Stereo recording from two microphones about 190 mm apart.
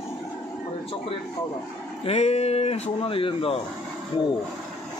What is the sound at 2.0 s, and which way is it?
Speech, 35° left (ahead or behind).